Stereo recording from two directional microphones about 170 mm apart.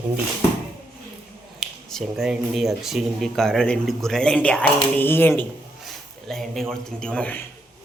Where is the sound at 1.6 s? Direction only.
Centre (ahead or behind).